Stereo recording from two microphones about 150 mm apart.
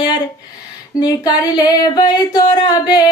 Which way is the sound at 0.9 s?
25° left (ahead or behind).